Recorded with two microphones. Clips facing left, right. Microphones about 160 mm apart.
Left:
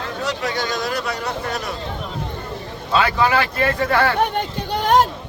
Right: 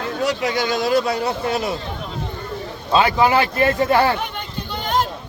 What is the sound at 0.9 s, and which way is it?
Speech, 30° right (ahead or behind).